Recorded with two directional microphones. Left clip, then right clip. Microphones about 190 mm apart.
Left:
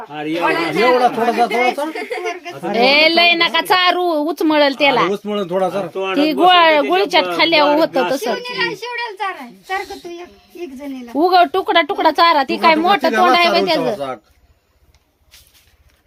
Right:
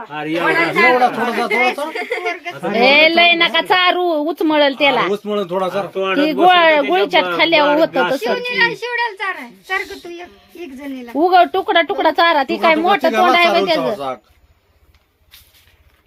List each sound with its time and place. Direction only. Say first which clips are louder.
0.1 s speech: right 1 dB; 45° left (ahead or behind)
1.9 s speech: right 2 dB; 20° left (ahead or behind)
2.2 s speech: right 2 dB; 70° left (ahead or behind)
2.7 s a woman's voice: right 1 dB; 5° left (ahead or behind)
5.1 s speech: even; 50° left (ahead or behind)
6.2 s a woman's voice: even; 5° left (ahead or behind)
8.4 s speech: right 5 dB; 70° left (ahead or behind)
11.1 s a woman's voice: right 1 dB; 5° left (ahead or behind)